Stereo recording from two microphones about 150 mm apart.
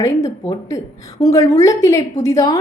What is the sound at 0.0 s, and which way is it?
A woman's voice, 25° left (ahead or behind).